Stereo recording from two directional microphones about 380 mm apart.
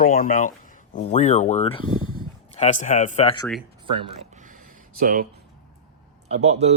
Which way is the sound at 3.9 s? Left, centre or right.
Centre.